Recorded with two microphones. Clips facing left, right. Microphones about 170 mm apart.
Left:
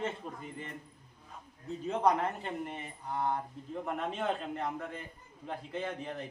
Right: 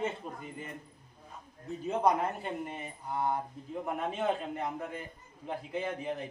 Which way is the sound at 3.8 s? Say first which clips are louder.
Right 2 dB; 5° right (ahead or behind).